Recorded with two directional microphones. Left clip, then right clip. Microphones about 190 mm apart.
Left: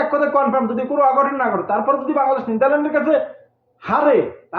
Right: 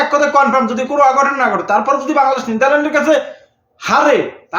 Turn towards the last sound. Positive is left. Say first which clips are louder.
# right 4 dB
turn(degrees=-15)  # may be behind; listen again after turning